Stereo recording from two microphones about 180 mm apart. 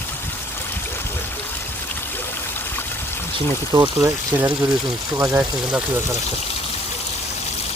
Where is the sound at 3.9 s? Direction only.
10° right (ahead or behind).